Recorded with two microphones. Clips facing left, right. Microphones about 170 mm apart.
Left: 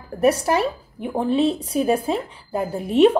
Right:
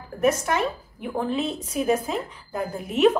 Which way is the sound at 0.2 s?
35° left (ahead or behind).